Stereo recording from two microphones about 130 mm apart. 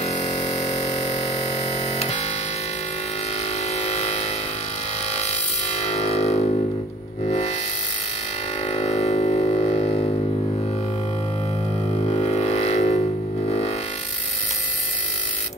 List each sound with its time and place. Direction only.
0.0 s music: 55° left (ahead or behind)
3.7 s a sound: 55° left (ahead or behind)
7.2 s music: 55° left (ahead or behind)
8.6 s music: 55° left (ahead or behind)
12.1 s a sound: 55° left (ahead or behind)
13.5 s music: 55° left (ahead or behind)